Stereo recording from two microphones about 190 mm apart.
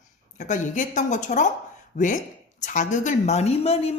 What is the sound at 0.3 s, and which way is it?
A woman's voice, 40° left (ahead or behind).